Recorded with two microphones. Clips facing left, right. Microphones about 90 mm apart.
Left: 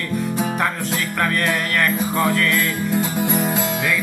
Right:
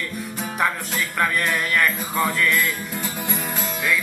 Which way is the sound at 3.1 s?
20° left (ahead or behind).